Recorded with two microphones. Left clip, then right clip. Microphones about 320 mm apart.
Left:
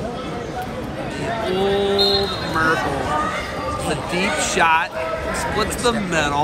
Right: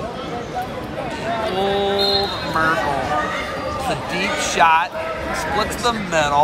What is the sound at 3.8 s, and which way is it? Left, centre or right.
Music, centre.